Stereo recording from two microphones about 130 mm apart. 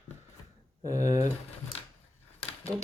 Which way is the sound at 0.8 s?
25° right (ahead or behind).